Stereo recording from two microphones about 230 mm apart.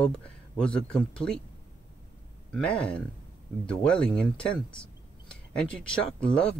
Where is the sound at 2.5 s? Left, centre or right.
Centre.